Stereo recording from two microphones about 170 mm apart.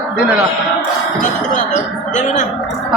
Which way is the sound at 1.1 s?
45° left (ahead or behind).